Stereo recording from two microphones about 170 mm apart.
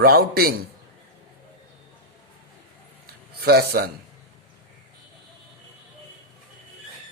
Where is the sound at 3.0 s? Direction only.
65° right (ahead or behind).